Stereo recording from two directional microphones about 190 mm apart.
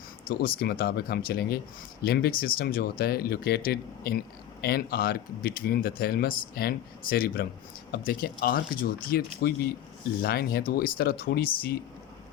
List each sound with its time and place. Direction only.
0.3 s speech: 50° left (ahead or behind)